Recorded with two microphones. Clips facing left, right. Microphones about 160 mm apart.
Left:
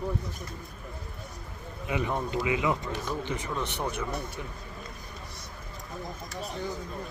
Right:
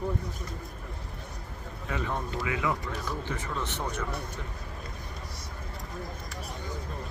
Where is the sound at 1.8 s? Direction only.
15° left (ahead or behind).